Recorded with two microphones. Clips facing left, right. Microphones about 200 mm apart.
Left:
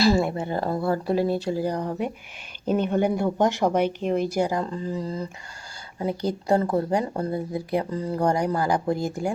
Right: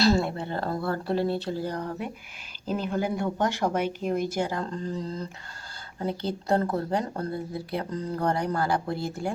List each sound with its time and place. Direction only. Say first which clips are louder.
0.0 s speech: left 2 dB; 10° left (ahead or behind)
2.7 s speech: left 5 dB; centre (ahead or behind)
3.3 s speech: left 5 dB; 15° left (ahead or behind)
4.0 s speech: left 3 dB; 35° left (ahead or behind)
4.4 s speech: left 4 dB; 10° left (ahead or behind)